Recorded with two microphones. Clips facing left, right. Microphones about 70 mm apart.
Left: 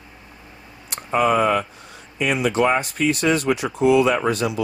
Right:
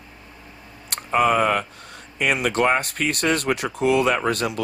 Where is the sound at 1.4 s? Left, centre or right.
Right.